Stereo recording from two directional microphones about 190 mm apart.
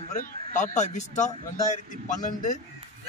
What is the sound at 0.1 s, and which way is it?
Speech, 40° left (ahead or behind).